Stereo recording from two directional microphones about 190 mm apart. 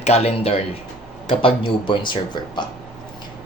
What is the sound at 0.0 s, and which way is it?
Speech, 35° left (ahead or behind).